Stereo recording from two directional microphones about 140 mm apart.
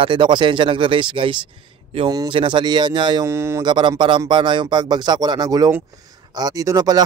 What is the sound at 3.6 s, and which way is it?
A man's voice, 35° right (ahead or behind).